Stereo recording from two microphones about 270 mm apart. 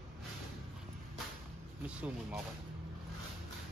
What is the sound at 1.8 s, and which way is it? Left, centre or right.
Speech, centre.